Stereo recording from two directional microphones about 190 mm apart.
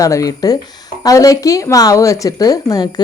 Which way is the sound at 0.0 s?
15° left (ahead or behind).